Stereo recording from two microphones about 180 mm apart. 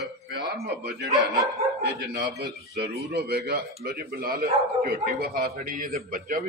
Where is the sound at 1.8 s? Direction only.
60° right (ahead or behind).